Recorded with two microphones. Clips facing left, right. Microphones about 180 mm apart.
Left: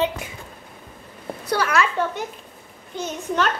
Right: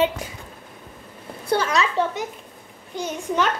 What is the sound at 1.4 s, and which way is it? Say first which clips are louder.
A child's voice: even; 20° right (ahead or behind).